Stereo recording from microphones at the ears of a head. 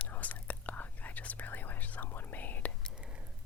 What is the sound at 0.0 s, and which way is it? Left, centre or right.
Whispering, left.